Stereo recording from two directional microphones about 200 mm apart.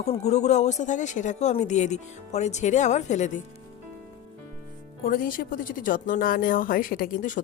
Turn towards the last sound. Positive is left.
turn(degrees=40)  # may be behind; listen again after turning